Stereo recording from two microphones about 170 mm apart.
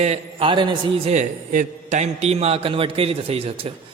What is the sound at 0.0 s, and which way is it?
A man's voice, 35° right (ahead or behind).